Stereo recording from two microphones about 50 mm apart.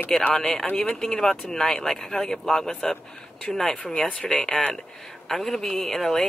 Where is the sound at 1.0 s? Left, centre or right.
Centre.